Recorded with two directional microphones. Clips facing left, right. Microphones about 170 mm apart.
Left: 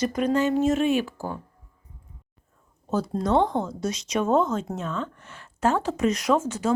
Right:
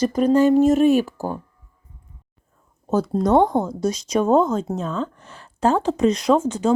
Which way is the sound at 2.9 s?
40° right (ahead or behind).